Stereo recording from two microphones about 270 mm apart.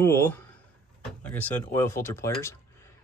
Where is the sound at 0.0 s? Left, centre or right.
Centre.